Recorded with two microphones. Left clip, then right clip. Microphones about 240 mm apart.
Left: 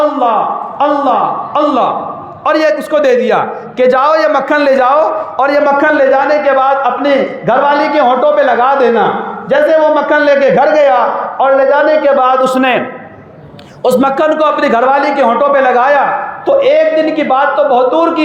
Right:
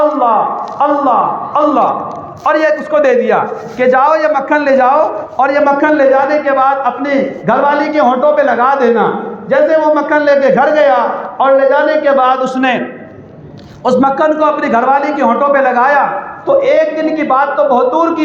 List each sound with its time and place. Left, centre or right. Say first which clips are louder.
0.8 s a man's voice: even; left
13.8 s a man's voice: left 1 dB; left